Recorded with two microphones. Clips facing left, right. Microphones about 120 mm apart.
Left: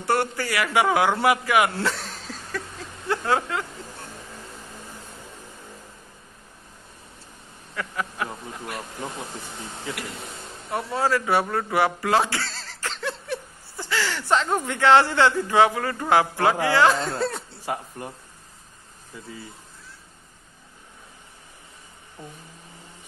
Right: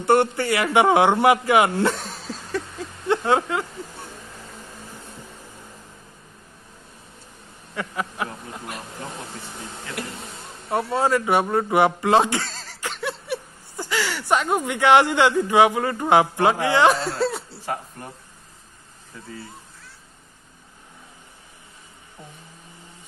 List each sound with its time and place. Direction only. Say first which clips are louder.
0.0 s a man's voice: right 6 dB; 25° right (ahead or behind)
3.1 s a sound: right 4 dB; 20° right (ahead or behind)
7.7 s a sound: right 2 dB; 20° right (ahead or behind)
10.7 s speech: right 3 dB; 25° right (ahead or behind)
17.2 s chuckle: right 3 dB; 5° right (ahead or behind)
17.6 s speech: even; 5° left (ahead or behind)